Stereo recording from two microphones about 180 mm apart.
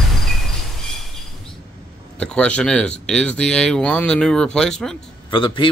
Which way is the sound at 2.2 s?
5° left (ahead or behind).